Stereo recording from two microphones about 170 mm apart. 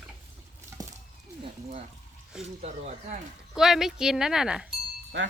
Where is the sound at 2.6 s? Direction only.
45° right (ahead or behind).